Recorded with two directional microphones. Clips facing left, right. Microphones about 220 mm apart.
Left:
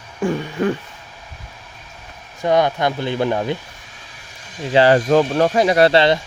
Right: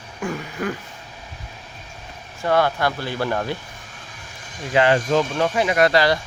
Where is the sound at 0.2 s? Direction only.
30° left (ahead or behind).